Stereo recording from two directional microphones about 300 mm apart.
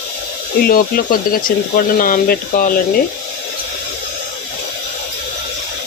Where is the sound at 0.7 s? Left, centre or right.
Left.